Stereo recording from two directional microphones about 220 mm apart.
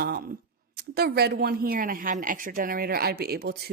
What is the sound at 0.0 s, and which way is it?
A woman's voice, 45° right (ahead or behind).